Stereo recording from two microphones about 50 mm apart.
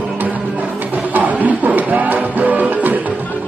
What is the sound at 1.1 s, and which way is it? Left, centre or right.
Music, right.